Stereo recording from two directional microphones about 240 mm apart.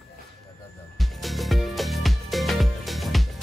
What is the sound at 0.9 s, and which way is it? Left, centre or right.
Music, centre.